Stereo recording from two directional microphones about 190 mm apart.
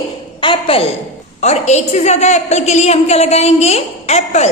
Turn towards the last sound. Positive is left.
turn(degrees=35)  # may be behind; listen again after turning